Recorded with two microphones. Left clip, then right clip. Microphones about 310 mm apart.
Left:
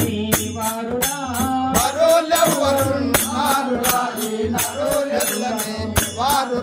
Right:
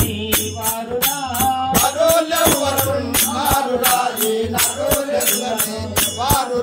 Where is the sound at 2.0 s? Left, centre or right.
Centre.